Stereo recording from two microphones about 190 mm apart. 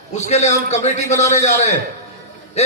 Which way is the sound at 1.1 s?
15° left (ahead or behind).